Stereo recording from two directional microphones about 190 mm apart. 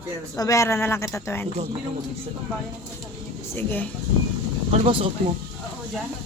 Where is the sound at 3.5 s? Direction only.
10° left (ahead or behind).